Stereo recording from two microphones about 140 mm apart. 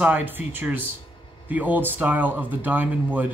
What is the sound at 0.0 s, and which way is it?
Speech, 15° right (ahead or behind).